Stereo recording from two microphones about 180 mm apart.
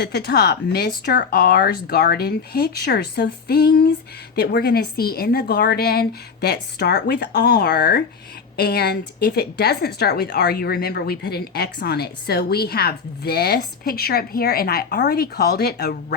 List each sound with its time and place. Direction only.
0.0 s speech: 65° left (ahead or behind)